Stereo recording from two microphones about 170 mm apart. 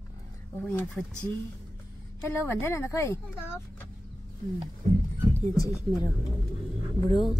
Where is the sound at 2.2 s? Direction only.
15° left (ahead or behind).